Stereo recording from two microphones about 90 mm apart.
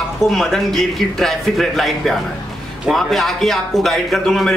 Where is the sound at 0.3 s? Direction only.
5° left (ahead or behind).